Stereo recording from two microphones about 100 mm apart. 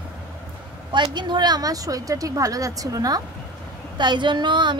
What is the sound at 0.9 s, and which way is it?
Speech, 50° right (ahead or behind).